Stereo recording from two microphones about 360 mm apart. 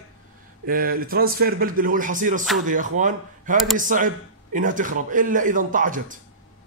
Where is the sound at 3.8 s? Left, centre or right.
Right.